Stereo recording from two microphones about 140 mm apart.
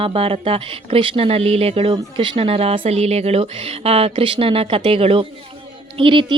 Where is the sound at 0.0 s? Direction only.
40° right (ahead or behind).